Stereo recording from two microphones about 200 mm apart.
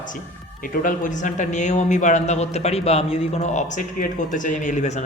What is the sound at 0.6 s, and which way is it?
A man's voice, 45° left (ahead or behind).